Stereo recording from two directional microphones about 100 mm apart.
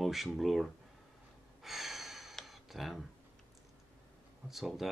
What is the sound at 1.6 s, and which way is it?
Gasp, centre (ahead or behind).